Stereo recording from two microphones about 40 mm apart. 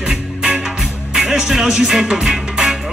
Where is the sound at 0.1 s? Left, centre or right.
Centre.